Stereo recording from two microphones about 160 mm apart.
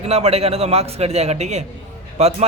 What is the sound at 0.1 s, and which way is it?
A man's voice, 40° right (ahead or behind).